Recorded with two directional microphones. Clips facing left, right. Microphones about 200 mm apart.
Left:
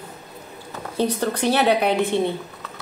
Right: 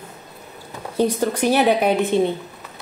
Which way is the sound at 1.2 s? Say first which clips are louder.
Right 2 dB; 15° right (ahead or behind).